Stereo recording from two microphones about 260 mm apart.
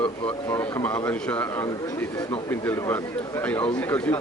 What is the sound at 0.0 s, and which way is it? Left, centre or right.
Speech, centre.